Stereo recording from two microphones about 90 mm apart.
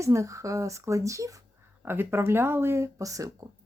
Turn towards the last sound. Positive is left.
turn(degrees=-40)  # may be behind; listen again after turning